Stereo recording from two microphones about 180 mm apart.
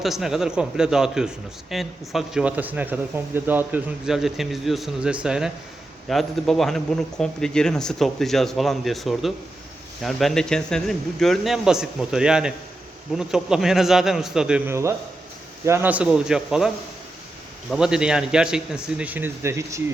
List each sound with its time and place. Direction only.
0.0 s speech: centre (ahead or behind)